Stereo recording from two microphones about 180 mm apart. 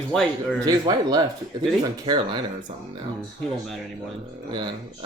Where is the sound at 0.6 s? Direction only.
20° right (ahead or behind).